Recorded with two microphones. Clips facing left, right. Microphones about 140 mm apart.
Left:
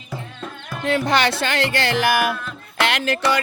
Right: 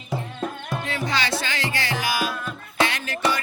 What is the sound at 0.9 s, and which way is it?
Music, 65° left (ahead or behind).